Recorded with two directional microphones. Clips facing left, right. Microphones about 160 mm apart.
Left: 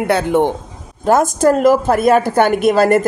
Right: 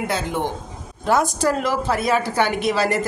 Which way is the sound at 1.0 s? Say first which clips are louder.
Left 7 dB; 45° left (ahead or behind).